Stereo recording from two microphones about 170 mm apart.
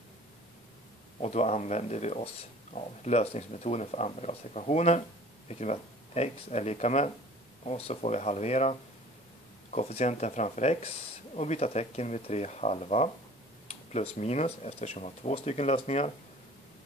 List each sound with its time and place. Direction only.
1.2 s speech: 40° left (ahead or behind)